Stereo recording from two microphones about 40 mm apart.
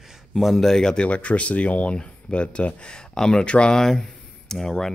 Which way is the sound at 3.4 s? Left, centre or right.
Left.